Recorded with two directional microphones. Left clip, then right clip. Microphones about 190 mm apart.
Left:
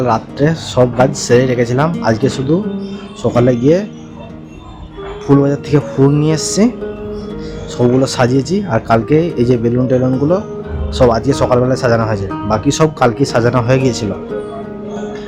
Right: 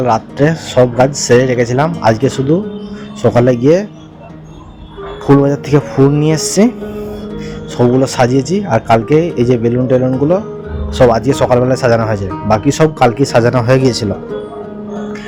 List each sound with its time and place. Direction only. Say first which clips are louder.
0.0 s speech: right 2 dB; 15° right (ahead or behind)
3.2 s speech: right 2 dB; 20° right (ahead or behind)
5.2 s speech: right 2 dB; 20° right (ahead or behind)
7.8 s speech: right 2 dB; 10° right (ahead or behind)
11.0 s speech: right 2 dB; 15° right (ahead or behind)